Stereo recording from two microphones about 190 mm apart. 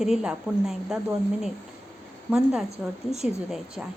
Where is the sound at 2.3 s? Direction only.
5° right (ahead or behind).